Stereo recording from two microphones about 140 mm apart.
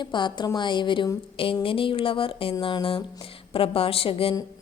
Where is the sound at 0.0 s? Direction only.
35° left (ahead or behind).